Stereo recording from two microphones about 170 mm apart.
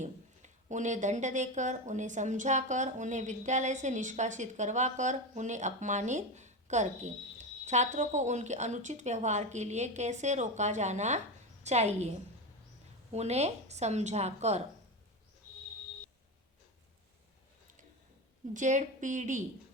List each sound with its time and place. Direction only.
0.0 s a woman's voice: 45° right (ahead or behind)
13.1 s a woman's voice: 40° right (ahead or behind)
18.5 s speech: 45° right (ahead or behind)